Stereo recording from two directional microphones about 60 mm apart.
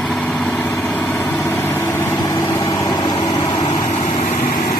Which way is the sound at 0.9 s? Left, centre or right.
Left.